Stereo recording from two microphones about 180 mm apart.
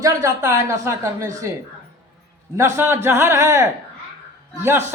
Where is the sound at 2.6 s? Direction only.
15° right (ahead or behind).